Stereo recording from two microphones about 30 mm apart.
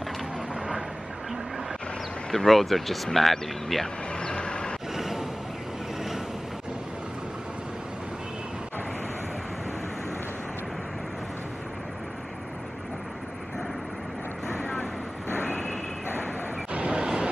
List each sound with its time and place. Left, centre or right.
2.3 s speech: centre
4.2 s vehicle: left
4.9 s a sound: centre
15.3 s vehicle: left
16.8 s vehicle: right